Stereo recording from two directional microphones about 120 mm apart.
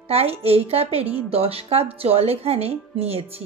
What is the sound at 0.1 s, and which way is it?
A woman's voice, 55° right (ahead or behind).